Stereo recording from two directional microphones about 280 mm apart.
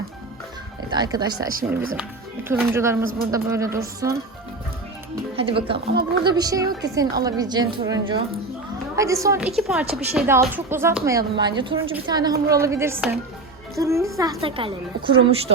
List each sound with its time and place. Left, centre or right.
0.9 s speech: centre
2.5 s speech: centre
5.4 s a woman's voice: centre